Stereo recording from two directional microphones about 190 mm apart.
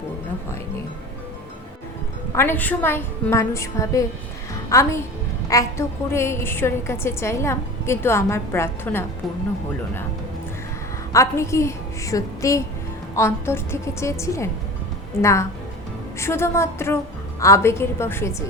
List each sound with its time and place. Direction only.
2.3 s a woman's voice: 10° left (ahead or behind)
11.1 s a woman's voice: 15° left (ahead or behind)